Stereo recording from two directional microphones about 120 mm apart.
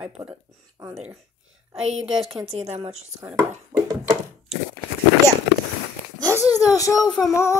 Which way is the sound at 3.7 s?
35° right (ahead or behind).